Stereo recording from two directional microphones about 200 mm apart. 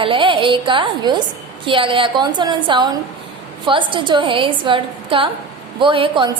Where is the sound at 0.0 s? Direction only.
25° right (ahead or behind).